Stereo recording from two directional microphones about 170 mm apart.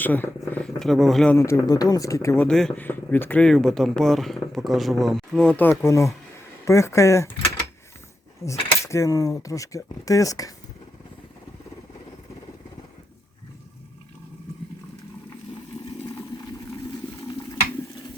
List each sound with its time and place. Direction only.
0.0 s speech: 10° left (ahead or behind)
1.4 s speech: 20° left (ahead or behind)
2.5 s speech: 5° left (ahead or behind)
8.4 s speech: 15° left (ahead or behind)